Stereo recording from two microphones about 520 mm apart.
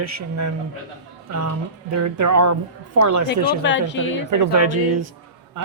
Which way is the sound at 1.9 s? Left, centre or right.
Right.